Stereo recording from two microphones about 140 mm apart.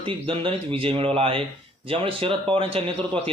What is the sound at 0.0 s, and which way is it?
A man's voice, 40° right (ahead or behind).